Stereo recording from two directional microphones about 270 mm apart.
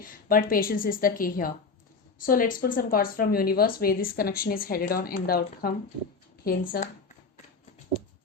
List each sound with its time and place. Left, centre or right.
0.0 s speech: left